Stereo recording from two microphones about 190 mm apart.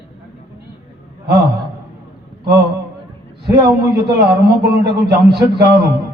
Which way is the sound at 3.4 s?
20° right (ahead or behind).